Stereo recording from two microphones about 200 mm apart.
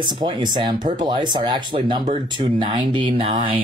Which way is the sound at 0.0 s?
20° right (ahead or behind).